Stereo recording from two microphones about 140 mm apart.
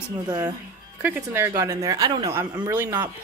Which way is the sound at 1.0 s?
15° right (ahead or behind).